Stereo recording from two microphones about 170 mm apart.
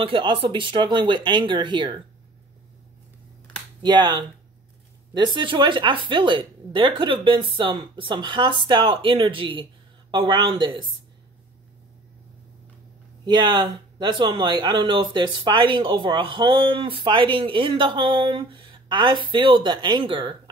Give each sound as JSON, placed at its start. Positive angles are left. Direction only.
{"t": 0.0, "sound": "speech", "side_deg": -30}
{"t": 3.8, "sound": "speech", "side_deg": -25}
{"t": 13.2, "sound": "speech", "side_deg": -25}